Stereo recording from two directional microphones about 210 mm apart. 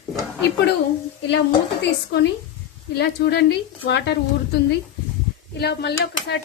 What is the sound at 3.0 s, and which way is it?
Speech, 50° left (ahead or behind).